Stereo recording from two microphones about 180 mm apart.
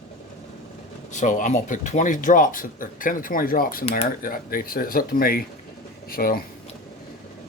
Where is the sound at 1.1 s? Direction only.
45° left (ahead or behind).